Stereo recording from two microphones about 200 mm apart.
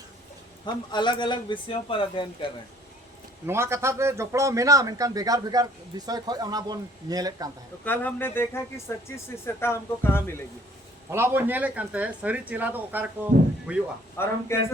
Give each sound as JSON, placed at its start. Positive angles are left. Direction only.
{"t": 0.6, "sound": "speech", "side_deg": 20}
{"t": 3.4, "sound": "a man's voice", "side_deg": -15}
{"t": 7.9, "sound": "speech", "side_deg": 10}
{"t": 11.1, "sound": "a man's voice", "side_deg": -10}
{"t": 14.2, "sound": "speech", "side_deg": 10}